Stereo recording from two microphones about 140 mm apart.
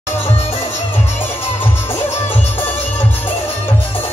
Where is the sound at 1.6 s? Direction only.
15° left (ahead or behind).